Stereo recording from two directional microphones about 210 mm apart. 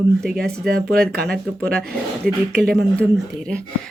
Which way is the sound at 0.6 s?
50° right (ahead or behind).